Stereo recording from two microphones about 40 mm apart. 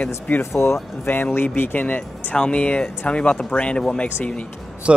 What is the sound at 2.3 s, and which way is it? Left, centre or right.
Speech, left.